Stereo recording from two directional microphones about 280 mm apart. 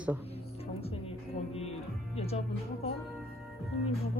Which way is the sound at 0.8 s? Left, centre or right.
Left.